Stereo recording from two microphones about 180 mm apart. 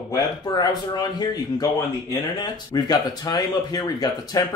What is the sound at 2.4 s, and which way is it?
Speech, 25° left (ahead or behind).